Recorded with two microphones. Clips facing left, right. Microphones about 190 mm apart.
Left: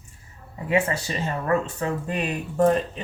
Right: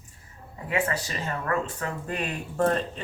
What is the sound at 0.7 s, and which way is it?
Speech, 20° left (ahead or behind).